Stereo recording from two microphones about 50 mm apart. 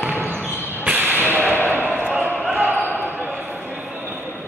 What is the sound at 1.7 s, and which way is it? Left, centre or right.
Basketball bounce, right.